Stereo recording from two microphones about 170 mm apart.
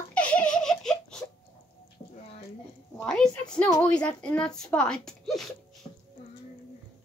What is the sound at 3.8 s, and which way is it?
Speech, 10° left (ahead or behind).